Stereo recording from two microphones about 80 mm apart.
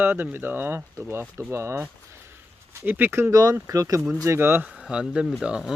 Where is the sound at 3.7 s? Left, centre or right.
Right.